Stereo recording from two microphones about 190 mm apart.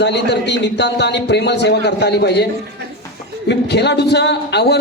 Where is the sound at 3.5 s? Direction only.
65° left (ahead or behind).